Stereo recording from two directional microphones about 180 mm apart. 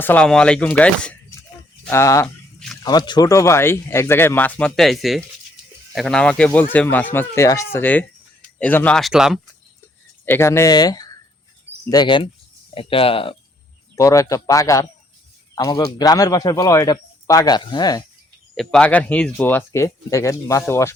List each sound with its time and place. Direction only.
0.0 s speech: 5° left (ahead or behind)
2.2 s a sound: 5° left (ahead or behind)
2.8 s speech: 25° left (ahead or behind); by 9.4 s centre (ahead or behind)
10.2 s speech: 15° left (ahead or behind); by 13.3 s 30° left (ahead or behind)
13.9 s speech: 15° left (ahead or behind)
18.5 s speech: centre (ahead or behind)